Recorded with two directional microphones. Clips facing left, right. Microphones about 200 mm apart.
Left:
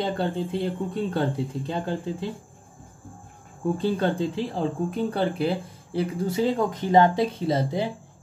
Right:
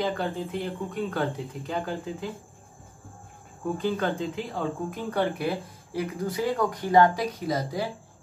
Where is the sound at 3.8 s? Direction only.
30° left (ahead or behind).